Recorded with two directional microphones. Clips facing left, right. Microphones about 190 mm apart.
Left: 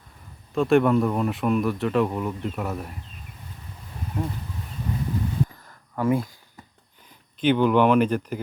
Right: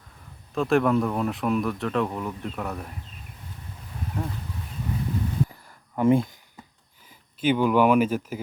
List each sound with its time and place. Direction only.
0.5 s speech: centre (ahead or behind)
6.0 s speech: 25° right (ahead or behind)
7.4 s speech: 5° right (ahead or behind)